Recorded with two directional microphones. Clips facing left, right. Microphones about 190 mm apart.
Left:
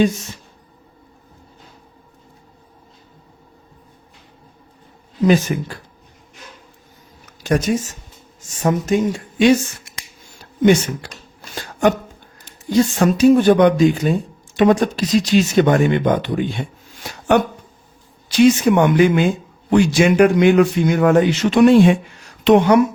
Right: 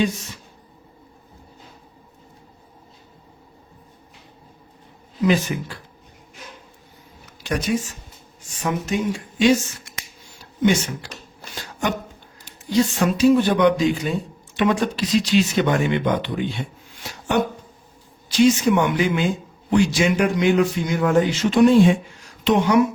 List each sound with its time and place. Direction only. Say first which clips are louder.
5.2 s speech: left 4 dB; 45° left (ahead or behind)
7.3 s speech: left 5 dB; 45° left (ahead or behind)
10.6 s speech: left 5 dB; 55° left (ahead or behind)
11.5 s a sound: left 8 dB; 50° left (ahead or behind)
12.5 s speech: left 3 dB; 45° left (ahead or behind)
18.3 s a man's voice: left 4 dB; 55° left (ahead or behind)
22.4 s a man's voice: left 6 dB; 60° left (ahead or behind)